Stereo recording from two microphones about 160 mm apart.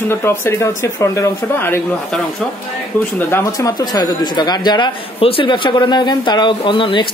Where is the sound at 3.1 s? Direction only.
15° left (ahead or behind).